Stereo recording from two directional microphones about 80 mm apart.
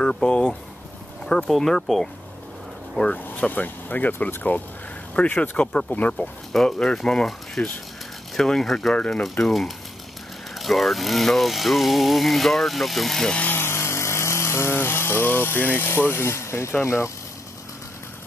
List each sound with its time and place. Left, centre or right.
0.0 s speech: centre
3.3 s speech: left
6.5 s speech: centre
8.9 s speech: centre
9.4 s speech: centre
13.4 s speech: left